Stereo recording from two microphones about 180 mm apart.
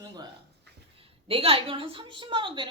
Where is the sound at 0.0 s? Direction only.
20° right (ahead or behind).